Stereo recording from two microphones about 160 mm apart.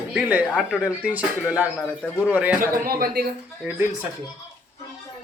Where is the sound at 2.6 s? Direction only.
65° right (ahead or behind).